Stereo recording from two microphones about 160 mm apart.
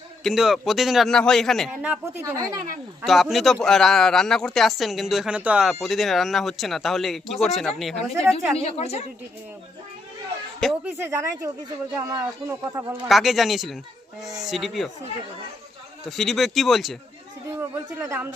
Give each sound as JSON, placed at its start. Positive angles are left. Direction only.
{"t": 0.2, "sound": "a man's voice", "side_deg": 0}
{"t": 1.7, "sound": "speech", "side_deg": -10}
{"t": 2.3, "sound": "speech", "side_deg": -20}
{"t": 3.0, "sound": "a man's voice", "side_deg": 0}
{"t": 8.5, "sound": "a woman's voice", "side_deg": 40}
{"t": 10.6, "sound": "a man's voice", "side_deg": 0}
{"t": 11.1, "sound": "speech", "side_deg": -20}
{"t": 13.1, "sound": "a man's voice", "side_deg": 0}
{"t": 16.0, "sound": "a man's voice", "side_deg": 0}
{"t": 17.5, "sound": "speech", "side_deg": -15}